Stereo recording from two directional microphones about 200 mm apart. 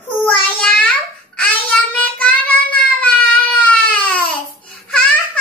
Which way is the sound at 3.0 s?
5° left (ahead or behind).